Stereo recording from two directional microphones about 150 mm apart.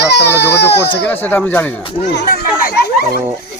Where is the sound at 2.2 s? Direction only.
75° left (ahead or behind).